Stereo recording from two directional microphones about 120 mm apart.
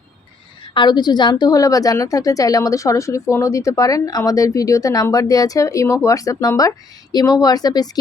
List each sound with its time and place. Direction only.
0.6 s a woman's voice: 40° left (ahead or behind)